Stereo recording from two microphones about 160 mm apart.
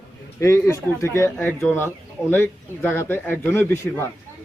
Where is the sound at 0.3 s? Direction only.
15° left (ahead or behind).